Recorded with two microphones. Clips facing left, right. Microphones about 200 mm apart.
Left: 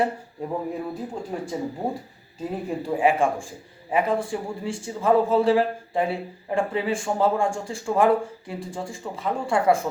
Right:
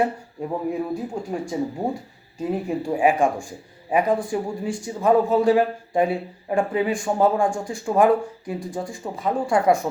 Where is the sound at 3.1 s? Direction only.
15° right (ahead or behind).